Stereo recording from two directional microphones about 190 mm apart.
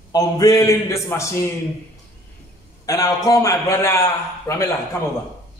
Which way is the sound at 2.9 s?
20° left (ahead or behind).